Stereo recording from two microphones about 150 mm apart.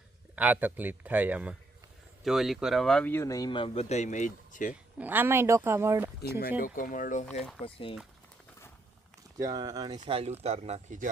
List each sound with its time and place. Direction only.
0.3 s speech: 10° right (ahead or behind); by 4.7 s 55° left (ahead or behind)
4.7 s speech: 10° right (ahead or behind)
6.6 s speech: 65° left (ahead or behind)
7.6 s speech: 35° left (ahead or behind)
9.4 s speech: 25° right (ahead or behind)
10.1 s speech: 40° right (ahead or behind)